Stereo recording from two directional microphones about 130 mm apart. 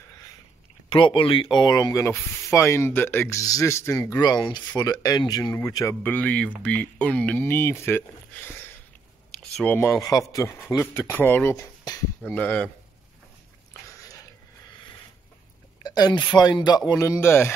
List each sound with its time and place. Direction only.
0.8 s speech: 40° left (ahead or behind); by 4.2 s 20° left (ahead or behind)
4.2 s speech: 35° left (ahead or behind)
6.0 s speech: 10° left (ahead or behind)
11.5 s a sound: 30° left (ahead or behind)
12.3 s speech: 10° left (ahead or behind)
15.8 s speech: 30° left (ahead or behind)